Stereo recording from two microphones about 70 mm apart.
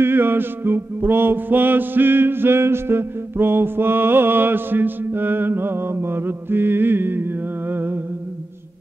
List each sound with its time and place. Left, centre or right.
0.0 s music: right
7.7 s humming: right